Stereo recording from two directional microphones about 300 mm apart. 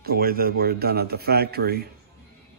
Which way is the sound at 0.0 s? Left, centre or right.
Right.